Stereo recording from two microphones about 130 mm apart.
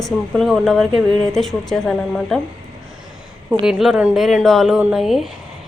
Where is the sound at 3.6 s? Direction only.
Centre (ahead or behind).